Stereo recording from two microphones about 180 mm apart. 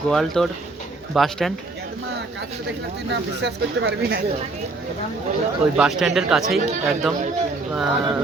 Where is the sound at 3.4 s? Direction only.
70° right (ahead or behind).